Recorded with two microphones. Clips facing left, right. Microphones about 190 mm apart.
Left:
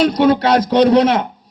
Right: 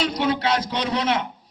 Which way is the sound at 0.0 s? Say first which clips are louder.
Left 10 dB; 50° left (ahead or behind).